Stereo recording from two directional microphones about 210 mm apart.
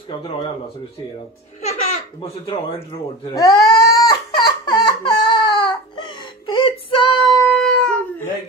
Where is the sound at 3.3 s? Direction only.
20° left (ahead or behind).